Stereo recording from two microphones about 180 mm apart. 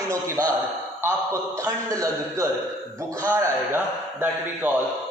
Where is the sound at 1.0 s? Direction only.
15° right (ahead or behind).